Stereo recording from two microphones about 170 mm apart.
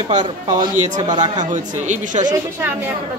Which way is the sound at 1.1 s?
25° right (ahead or behind).